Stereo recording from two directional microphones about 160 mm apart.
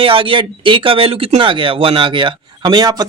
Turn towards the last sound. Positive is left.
turn(degrees=-25)  # may be behind; listen again after turning